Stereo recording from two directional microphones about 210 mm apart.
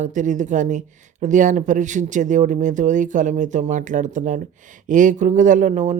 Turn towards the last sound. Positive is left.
turn(degrees=-35)  # may be behind; listen again after turning